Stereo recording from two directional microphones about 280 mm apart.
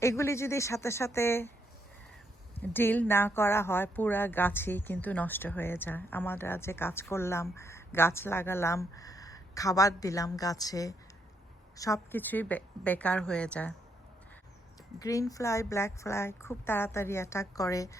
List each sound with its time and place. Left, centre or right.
0.0 s speech: centre
2.6 s a woman's voice: centre
14.9 s speech: centre